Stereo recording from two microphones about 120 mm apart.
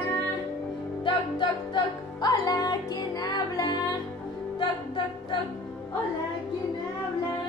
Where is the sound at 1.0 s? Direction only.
40° left (ahead or behind).